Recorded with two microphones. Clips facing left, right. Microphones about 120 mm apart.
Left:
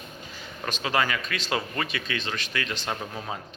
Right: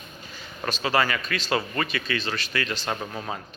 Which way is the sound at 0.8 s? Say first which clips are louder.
Right 2 dB; centre (ahead or behind).